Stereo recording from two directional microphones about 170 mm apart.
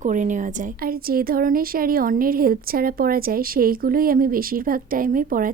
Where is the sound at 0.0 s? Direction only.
50° right (ahead or behind).